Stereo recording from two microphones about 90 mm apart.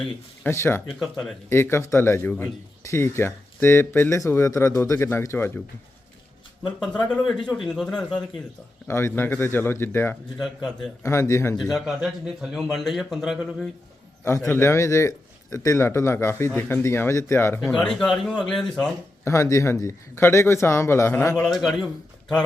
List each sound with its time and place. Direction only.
0.4 s speech: 25° left (ahead or behind)
0.9 s speech: 5° left (ahead or behind)
1.5 s speech: 25° left (ahead or behind)
7.3 s speech: 5° left (ahead or behind)
8.9 s speech: 30° left (ahead or behind)
10.3 s speech: 5° left (ahead or behind)
11.0 s speech: 30° left (ahead or behind)
11.5 s speech: centre (ahead or behind)
14.5 s speech: 30° left (ahead or behind)
17.7 s speech: 5° left (ahead or behind)
19.2 s speech: 30° left (ahead or behind)
21.5 s speech: centre (ahead or behind)